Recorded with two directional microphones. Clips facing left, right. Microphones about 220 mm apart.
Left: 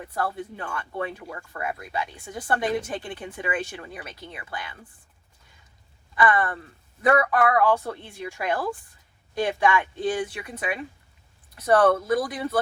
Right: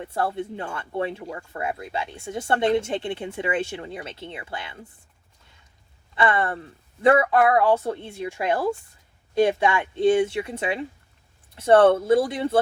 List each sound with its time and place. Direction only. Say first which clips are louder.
0.0 s speech: right 3 dB; 25° right (ahead or behind)
6.1 s speech: even; 25° right (ahead or behind)